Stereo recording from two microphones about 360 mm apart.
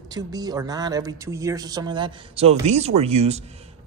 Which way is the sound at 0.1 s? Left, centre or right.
Centre.